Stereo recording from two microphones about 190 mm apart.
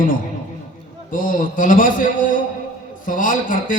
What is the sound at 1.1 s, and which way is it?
Speech, 45° left (ahead or behind).